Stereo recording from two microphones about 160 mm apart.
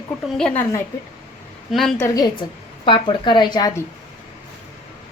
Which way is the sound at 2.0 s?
20° left (ahead or behind).